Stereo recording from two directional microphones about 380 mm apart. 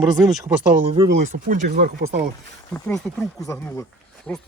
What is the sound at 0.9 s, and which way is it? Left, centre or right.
Speech, centre.